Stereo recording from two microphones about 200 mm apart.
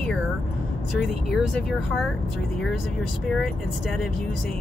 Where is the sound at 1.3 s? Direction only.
Centre (ahead or behind).